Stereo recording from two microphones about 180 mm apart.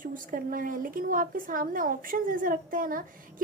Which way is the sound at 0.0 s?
50° right (ahead or behind).